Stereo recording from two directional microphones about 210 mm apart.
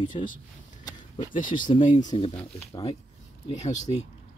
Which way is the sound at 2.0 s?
20° left (ahead or behind).